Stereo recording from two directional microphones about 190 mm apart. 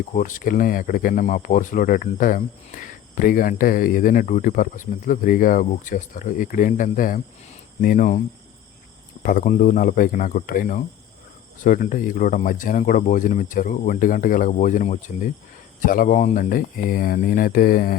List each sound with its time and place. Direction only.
0.1 s speech: 45° left (ahead or behind)
9.2 s speech: 45° left (ahead or behind)